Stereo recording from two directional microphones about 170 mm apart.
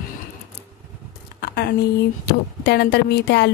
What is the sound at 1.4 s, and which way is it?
Speech, 70° left (ahead or behind).